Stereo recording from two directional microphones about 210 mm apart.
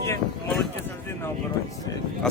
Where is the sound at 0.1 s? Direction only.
5° left (ahead or behind).